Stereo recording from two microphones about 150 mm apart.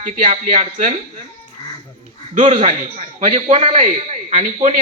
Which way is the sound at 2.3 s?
45° right (ahead or behind).